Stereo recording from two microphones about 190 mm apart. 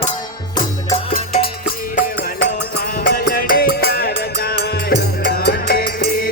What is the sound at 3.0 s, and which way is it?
Music, 50° left (ahead or behind).